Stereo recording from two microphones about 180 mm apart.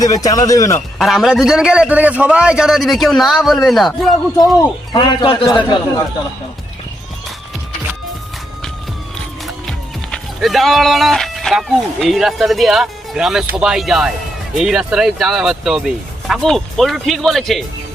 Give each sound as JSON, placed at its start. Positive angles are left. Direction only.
{"t": 0.0, "sound": "a man's voice", "side_deg": 20}
{"t": 0.9, "sound": "speech", "side_deg": 0}
{"t": 4.9, "sound": "a man's voice", "side_deg": 25}
{"t": 9.6, "sound": "speech", "side_deg": 0}